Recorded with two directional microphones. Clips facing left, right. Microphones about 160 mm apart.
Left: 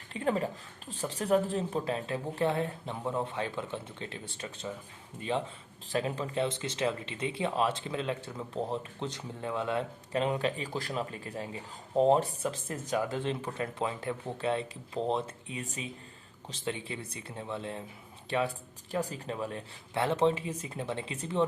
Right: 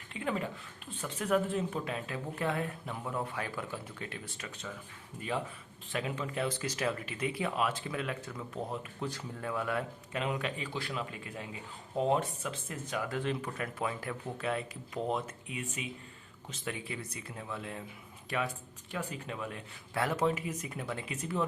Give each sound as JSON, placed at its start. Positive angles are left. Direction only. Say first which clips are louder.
{"t": 0.1, "sound": "speech", "louder": "left 5 dB", "side_deg": 35}
{"t": 5.9, "sound": "speech", "louder": "left 4 dB", "side_deg": 35}
{"t": 13.1, "sound": "speech", "louder": "left 1 dB", "side_deg": 25}